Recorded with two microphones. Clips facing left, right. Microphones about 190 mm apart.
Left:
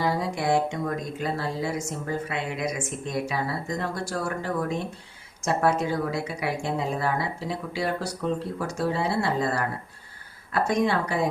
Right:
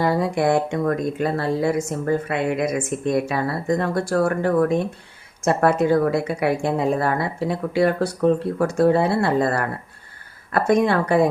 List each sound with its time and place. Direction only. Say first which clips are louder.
0.0 s speech: right 7 dB; 55° right (ahead or behind)